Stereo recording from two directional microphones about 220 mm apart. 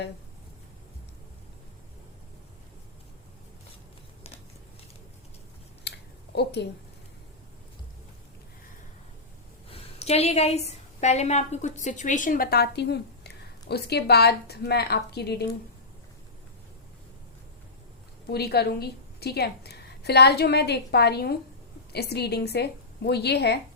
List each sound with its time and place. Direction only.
6.3 s a woman's voice: 50° left (ahead or behind)
9.7 s a woman's voice: 30° left (ahead or behind); by 15.4 s 45° left (ahead or behind)
18.3 s a woman's voice: 45° left (ahead or behind)